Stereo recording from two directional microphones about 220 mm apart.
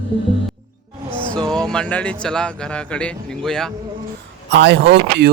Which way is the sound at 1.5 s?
5° left (ahead or behind).